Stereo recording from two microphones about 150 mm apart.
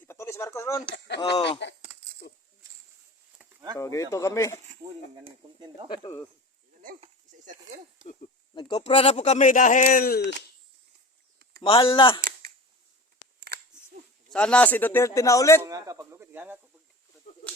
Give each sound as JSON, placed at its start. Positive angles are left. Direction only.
{"t": 0.0, "sound": "a sound", "side_deg": 15}
{"t": 2.3, "sound": "speech", "side_deg": 90}
{"t": 3.5, "sound": "a sound", "side_deg": -25}
{"t": 3.8, "sound": "speech", "side_deg": 20}
{"t": 5.2, "sound": "speech", "side_deg": -30}
{"t": 5.9, "sound": "speech", "side_deg": 30}
{"t": 7.0, "sound": "a sound", "side_deg": -55}
{"t": 8.5, "sound": "speech", "side_deg": 30}
{"t": 11.6, "sound": "speech", "side_deg": 35}
{"t": 14.3, "sound": "a man's voice", "side_deg": 5}
{"t": 15.6, "sound": "speech", "side_deg": -20}